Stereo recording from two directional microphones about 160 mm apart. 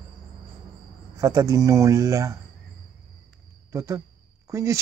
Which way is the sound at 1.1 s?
20° right (ahead or behind).